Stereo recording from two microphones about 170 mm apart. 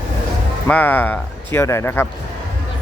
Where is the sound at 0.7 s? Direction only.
10° left (ahead or behind).